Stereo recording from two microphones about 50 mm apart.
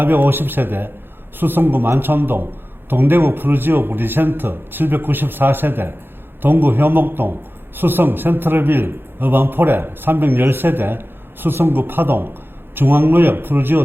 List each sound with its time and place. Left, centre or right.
0.0 s a man's voice: right